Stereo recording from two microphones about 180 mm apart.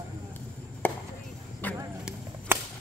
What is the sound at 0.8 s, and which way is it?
Chop, 10° left (ahead or behind).